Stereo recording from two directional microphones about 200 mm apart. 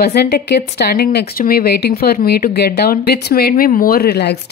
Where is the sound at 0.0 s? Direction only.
55° left (ahead or behind).